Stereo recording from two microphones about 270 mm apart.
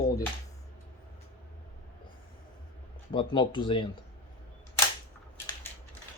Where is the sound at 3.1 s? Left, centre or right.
Centre.